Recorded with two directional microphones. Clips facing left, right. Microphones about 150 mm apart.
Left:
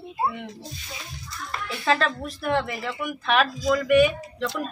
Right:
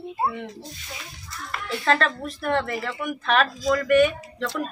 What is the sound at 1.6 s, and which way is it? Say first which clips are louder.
Speech: right 1 dB; 5° left (ahead or behind).